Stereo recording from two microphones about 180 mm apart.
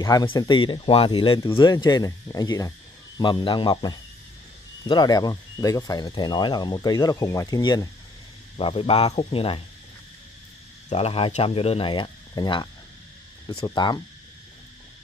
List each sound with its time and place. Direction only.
0.0 s speech: 20° left (ahead or behind)
8.5 s speech: 30° left (ahead or behind)
10.9 s speech: 35° left (ahead or behind)
13.7 s speech: 25° left (ahead or behind)